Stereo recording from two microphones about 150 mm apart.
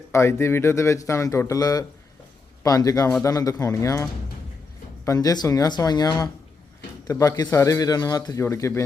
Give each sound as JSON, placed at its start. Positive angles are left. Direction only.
{"t": 0.1, "sound": "a man's voice", "side_deg": 15}